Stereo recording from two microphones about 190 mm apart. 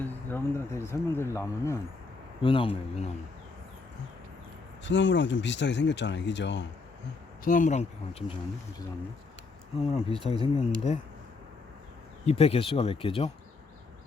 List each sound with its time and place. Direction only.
0.0 s speech: 10° left (ahead or behind)
2.4 s speech: 25° left (ahead or behind)
4.8 s speech: 75° left (ahead or behind)
7.4 s speech: 45° left (ahead or behind)
9.9 s speech: 30° left (ahead or behind)
12.2 s speech: 30° left (ahead or behind)